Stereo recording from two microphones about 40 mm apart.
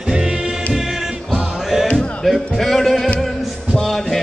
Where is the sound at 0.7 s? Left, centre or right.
Centre.